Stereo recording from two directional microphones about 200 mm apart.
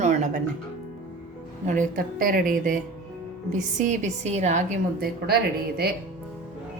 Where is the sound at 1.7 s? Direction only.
40° right (ahead or behind).